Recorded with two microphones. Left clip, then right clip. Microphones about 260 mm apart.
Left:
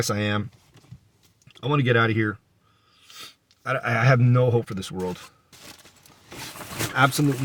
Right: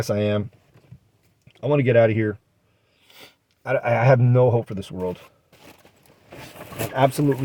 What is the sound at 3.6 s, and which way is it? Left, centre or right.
Speech, right.